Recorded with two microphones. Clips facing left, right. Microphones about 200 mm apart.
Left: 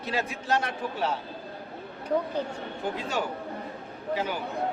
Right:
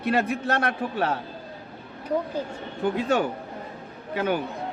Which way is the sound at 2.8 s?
55° right (ahead or behind).